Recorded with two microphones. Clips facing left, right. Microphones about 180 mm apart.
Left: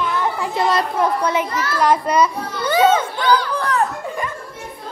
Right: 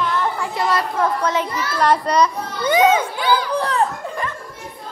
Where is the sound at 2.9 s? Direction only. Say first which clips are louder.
Left 1 dB; 10° right (ahead or behind).